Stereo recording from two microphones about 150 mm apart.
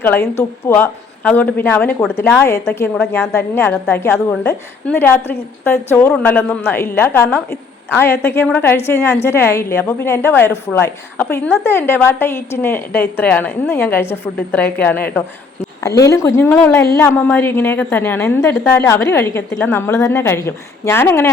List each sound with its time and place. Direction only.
0.0 s a woman's voice: 15° left (ahead or behind)